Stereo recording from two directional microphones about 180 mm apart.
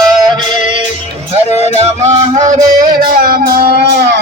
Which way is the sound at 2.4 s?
45° right (ahead or behind).